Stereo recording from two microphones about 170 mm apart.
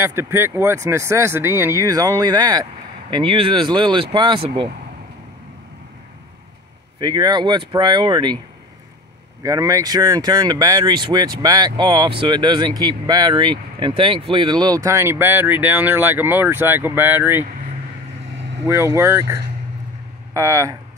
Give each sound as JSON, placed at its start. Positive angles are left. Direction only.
{"t": 0.0, "sound": "speech", "side_deg": -15}
{"t": 7.0, "sound": "speech", "side_deg": -25}
{"t": 9.4, "sound": "speech", "side_deg": -20}
{"t": 18.7, "sound": "speech", "side_deg": -15}